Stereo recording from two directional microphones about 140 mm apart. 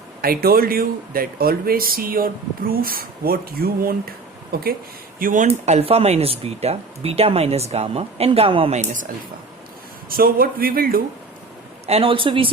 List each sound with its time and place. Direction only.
0.2 s speech: 90° right
5.2 s a woman's voice: 65° right (ahead or behind)
5.5 s speech: 50° right (ahead or behind)
8.7 s a woman's voice: 60° right (ahead or behind)
10.1 s speech: 90° right
11.9 s speech: 40° right (ahead or behind)